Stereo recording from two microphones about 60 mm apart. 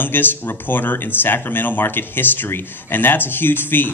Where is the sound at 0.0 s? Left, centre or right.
Left.